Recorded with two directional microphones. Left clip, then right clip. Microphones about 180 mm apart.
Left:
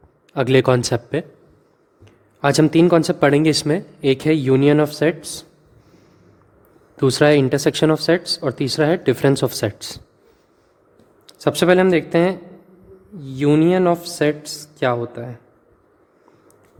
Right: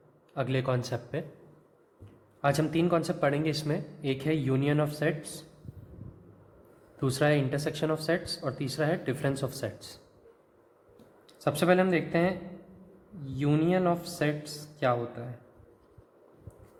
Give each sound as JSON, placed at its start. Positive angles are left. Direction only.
{"t": 0.3, "sound": "speech", "side_deg": 55}
{"t": 2.4, "sound": "speech", "side_deg": 50}
{"t": 6.9, "sound": "speech", "side_deg": 45}
{"t": 11.3, "sound": "speech", "side_deg": 50}